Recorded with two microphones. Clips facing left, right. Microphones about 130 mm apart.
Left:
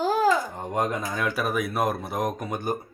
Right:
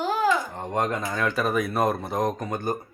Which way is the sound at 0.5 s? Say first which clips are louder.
Even; 10° left (ahead or behind).